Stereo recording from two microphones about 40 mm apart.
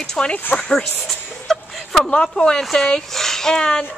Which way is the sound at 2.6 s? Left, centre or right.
Centre.